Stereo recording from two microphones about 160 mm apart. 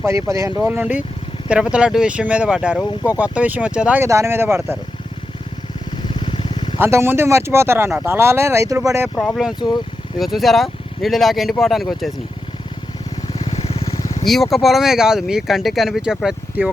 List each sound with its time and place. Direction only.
0.0 s speech: 20° right (ahead or behind)
0.5 s speech: 10° right (ahead or behind)
6.1 s motorcycle: 30° left (ahead or behind)
6.7 s speech: 15° right (ahead or behind)
9.1 s speech: 5° left (ahead or behind)
9.6 s speech: 25° left (ahead or behind)
10.2 s speech: centre (ahead or behind)
13.3 s vehicle: 40° left (ahead or behind)
14.0 s vehicle: 25° left (ahead or behind)
14.3 s speech: centre (ahead or behind)